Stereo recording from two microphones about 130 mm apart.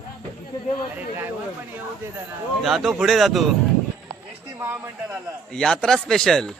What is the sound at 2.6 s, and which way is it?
Speech, centre (ahead or behind).